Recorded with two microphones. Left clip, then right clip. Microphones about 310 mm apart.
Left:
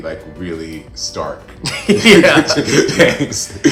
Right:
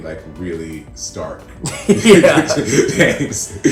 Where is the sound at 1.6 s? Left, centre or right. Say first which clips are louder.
Left 1 dB; centre.